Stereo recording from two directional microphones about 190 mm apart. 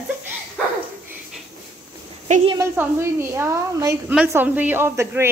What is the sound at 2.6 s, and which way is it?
A woman's voice, 15° right (ahead or behind).